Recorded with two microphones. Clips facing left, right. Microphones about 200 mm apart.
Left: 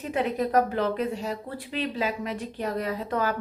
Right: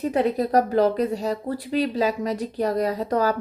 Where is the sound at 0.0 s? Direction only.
40° right (ahead or behind).